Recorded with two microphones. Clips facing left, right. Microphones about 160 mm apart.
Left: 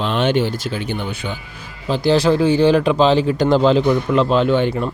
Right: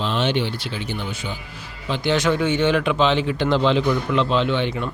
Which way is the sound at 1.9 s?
35° left (ahead or behind).